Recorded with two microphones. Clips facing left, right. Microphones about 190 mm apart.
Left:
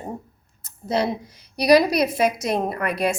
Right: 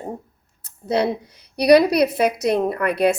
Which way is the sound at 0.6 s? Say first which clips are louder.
Right 2 dB; 60° right (ahead or behind).